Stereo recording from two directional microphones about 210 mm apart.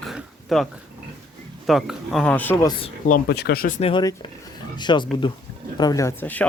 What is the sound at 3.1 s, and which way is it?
Speech, 50° left (ahead or behind).